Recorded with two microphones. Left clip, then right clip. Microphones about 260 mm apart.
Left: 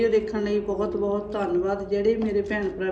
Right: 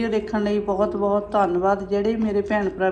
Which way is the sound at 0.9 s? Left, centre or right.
Left.